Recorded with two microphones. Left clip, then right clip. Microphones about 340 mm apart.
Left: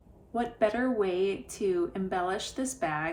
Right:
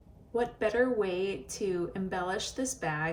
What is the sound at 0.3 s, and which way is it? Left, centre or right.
A woman's voice, centre.